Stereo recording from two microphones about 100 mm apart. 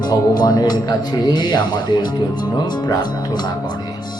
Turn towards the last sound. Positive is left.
turn(degrees=45)  # may be behind; listen again after turning